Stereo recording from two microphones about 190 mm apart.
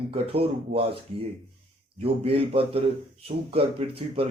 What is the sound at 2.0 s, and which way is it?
A man's voice, 30° right (ahead or behind).